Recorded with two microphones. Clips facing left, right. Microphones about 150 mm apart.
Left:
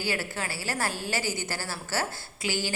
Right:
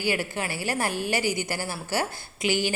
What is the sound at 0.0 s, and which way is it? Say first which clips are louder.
A woman's voice: right 4 dB; 15° right (ahead or behind).